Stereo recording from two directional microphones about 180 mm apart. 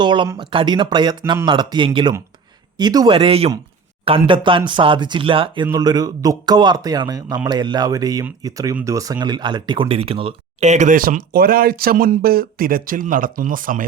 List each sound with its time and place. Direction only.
0.0 s a man's voice: 25° right (ahead or behind); by 13.8 s 50° right (ahead or behind)